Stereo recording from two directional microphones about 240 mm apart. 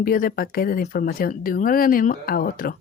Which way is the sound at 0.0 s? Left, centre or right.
Left.